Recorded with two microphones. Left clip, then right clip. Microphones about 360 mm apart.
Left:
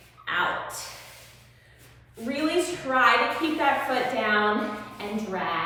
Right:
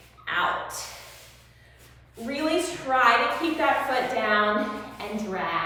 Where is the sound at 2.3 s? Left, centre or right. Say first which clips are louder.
Even; centre.